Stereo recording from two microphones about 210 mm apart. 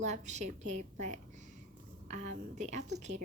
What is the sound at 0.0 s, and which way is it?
A woman's voice, 35° right (ahead or behind).